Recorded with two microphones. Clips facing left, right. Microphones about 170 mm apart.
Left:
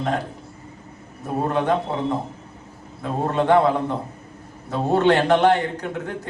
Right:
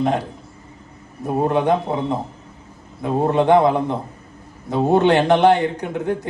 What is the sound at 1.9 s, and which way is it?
A man's voice, 15° right (ahead or behind).